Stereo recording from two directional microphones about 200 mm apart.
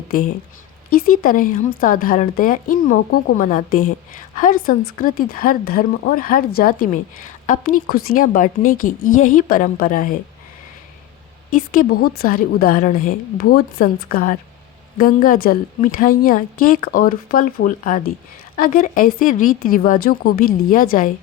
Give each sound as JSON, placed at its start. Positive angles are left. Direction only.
{"t": 0.9, "sound": "a woman's voice", "side_deg": 45}
{"t": 11.5, "sound": "a woman's voice", "side_deg": 45}